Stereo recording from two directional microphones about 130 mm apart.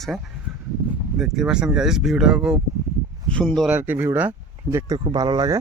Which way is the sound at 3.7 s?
10° right (ahead or behind).